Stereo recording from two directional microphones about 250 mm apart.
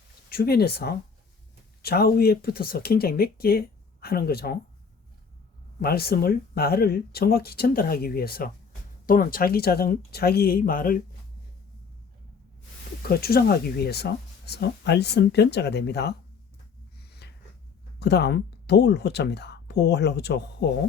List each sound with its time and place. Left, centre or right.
0.3 s speech: left
5.8 s speech: left
13.0 s speech: left
17.0 s a sound: left
18.0 s speech: left